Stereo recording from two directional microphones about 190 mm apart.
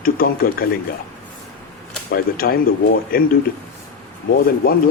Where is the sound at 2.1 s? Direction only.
50° left (ahead or behind).